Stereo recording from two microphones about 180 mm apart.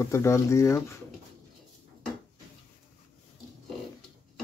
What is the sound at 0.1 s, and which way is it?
Speech, 15° left (ahead or behind).